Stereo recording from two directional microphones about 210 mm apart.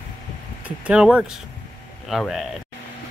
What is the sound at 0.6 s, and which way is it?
Speech, 5° right (ahead or behind).